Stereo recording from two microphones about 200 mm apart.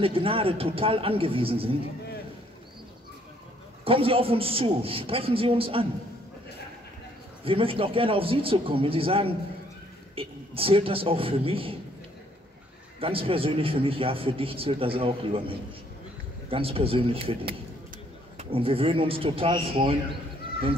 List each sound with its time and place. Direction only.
0.0 s a man's voice: 25° right (ahead or behind)
3.8 s a man's voice: 25° right (ahead or behind)
7.4 s a man's voice: 25° right (ahead or behind)
13.0 s a man's voice: 25° right (ahead or behind)